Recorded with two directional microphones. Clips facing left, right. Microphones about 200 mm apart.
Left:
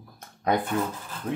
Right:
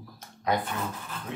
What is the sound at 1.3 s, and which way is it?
Speech, 50° left (ahead or behind).